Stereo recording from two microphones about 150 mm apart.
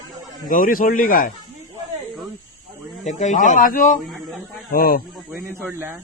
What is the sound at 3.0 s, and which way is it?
Speech, 55° left (ahead or behind).